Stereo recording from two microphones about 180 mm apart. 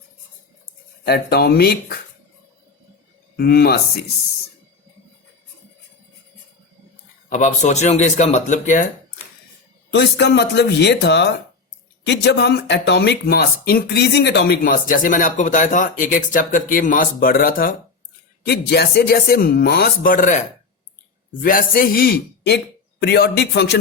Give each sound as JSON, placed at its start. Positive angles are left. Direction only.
{"t": 1.0, "sound": "a man's voice", "side_deg": 60}
{"t": 3.3, "sound": "a man's voice", "side_deg": 60}
{"t": 7.3, "sound": "speech", "side_deg": 45}
{"t": 9.9, "sound": "a man's voice", "side_deg": 75}
{"t": 21.4, "sound": "a man's voice", "side_deg": 50}